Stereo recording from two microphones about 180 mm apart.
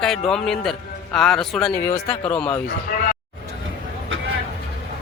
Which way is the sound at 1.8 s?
15° left (ahead or behind).